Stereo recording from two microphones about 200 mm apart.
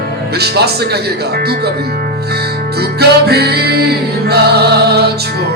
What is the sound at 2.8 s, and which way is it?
Music, 55° right (ahead or behind).